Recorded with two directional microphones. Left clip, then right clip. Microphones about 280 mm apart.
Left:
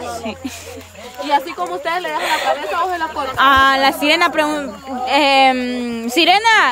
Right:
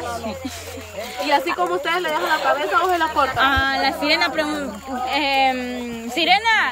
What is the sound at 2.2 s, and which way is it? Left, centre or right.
Speech, left.